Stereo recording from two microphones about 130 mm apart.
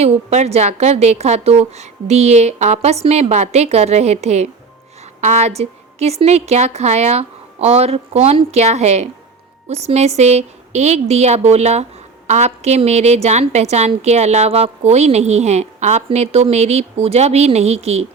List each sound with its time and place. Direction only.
0.0 s a woman's voice: 55° right (ahead or behind)